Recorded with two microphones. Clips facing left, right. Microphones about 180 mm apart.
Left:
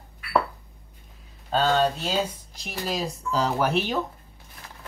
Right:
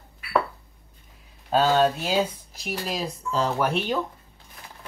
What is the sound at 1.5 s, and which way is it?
Speech, 5° right (ahead or behind).